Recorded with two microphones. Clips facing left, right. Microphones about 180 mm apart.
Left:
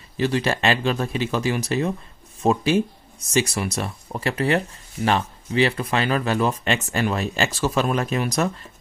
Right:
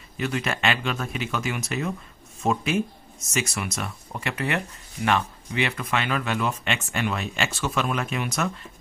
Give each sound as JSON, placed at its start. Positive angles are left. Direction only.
{"t": 0.2, "sound": "speech", "side_deg": 30}